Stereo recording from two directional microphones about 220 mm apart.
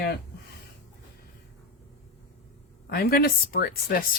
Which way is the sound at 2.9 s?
45° left (ahead or behind).